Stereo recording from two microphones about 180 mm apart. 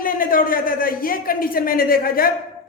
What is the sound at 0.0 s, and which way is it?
A man's voice, 50° left (ahead or behind).